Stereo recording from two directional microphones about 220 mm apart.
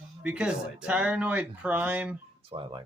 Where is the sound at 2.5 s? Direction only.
20° right (ahead or behind).